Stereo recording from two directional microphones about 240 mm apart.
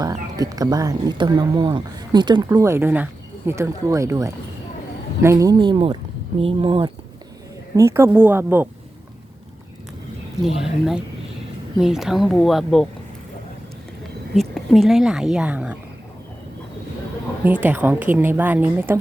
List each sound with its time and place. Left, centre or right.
0.0 s speech: centre
7.8 s speech: centre
10.4 s a woman's voice: centre
14.3 s a woman's voice: centre
17.4 s speech: centre